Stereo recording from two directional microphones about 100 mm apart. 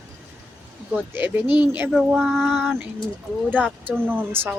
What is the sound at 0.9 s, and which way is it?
Speech, 20° right (ahead or behind).